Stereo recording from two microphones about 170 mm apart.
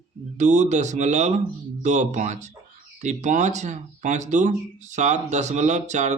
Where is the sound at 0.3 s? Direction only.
45° right (ahead or behind).